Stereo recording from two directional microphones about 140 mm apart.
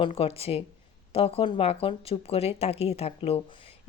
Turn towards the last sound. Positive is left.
turn(degrees=45)  # may be behind; listen again after turning